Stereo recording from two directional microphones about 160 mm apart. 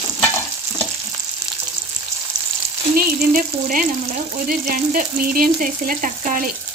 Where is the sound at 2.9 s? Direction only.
65° right (ahead or behind).